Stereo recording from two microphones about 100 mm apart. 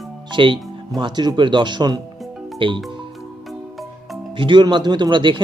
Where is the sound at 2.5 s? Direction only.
55° right (ahead or behind).